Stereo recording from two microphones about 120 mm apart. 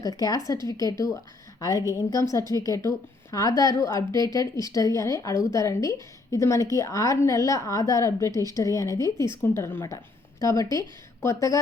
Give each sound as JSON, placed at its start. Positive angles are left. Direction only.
{"t": 0.0, "sound": "a woman's voice", "side_deg": 30}
{"t": 10.4, "sound": "a woman's voice", "side_deg": 30}